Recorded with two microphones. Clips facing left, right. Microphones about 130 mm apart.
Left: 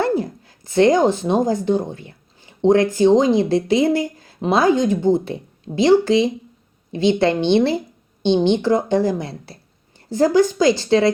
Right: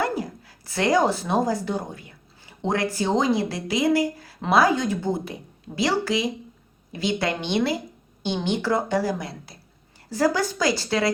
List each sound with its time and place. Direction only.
0.0 s speech: 25° left (ahead or behind)